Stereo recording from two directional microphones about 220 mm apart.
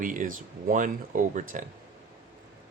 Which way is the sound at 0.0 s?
40° right (ahead or behind).